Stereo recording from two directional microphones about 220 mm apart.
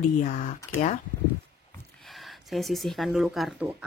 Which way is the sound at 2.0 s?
Centre (ahead or behind).